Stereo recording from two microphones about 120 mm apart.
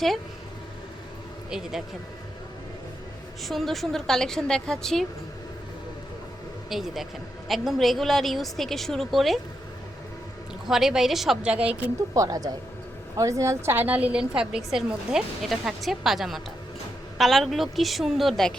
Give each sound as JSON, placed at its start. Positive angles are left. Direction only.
{"t": 1.5, "sound": "a woman's voice", "side_deg": -5}
{"t": 3.4, "sound": "a woman's voice", "side_deg": 0}
{"t": 6.7, "sound": "a woman's voice", "side_deg": 0}
{"t": 10.7, "sound": "a woman's voice", "side_deg": -5}
{"t": 12.1, "sound": "a woman's voice", "side_deg": -30}